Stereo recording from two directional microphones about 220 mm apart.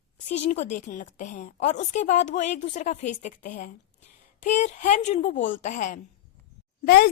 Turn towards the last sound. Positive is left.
turn(degrees=45)  # may be behind; listen again after turning